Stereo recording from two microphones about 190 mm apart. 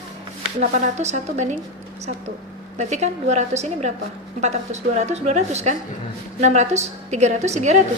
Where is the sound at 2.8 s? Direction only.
35° right (ahead or behind).